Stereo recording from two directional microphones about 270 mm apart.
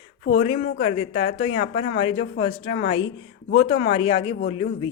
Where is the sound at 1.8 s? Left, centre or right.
Left.